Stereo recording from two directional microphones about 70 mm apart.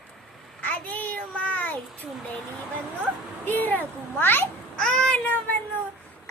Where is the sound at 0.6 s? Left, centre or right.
Left.